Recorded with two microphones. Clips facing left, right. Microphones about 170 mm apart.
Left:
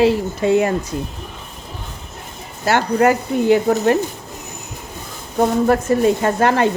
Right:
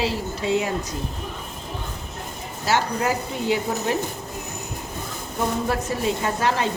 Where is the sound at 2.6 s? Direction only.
60° left (ahead or behind).